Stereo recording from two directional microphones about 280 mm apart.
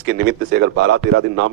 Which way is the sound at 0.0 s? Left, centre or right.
Right.